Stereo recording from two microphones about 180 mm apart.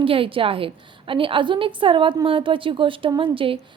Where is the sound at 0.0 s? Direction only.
30° right (ahead or behind).